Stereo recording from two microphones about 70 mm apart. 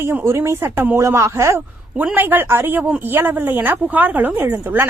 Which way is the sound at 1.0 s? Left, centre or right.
Right.